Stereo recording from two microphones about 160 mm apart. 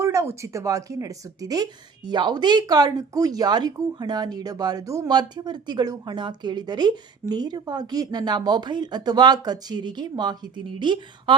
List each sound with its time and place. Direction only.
0.0 s speech: 20° right (ahead or behind)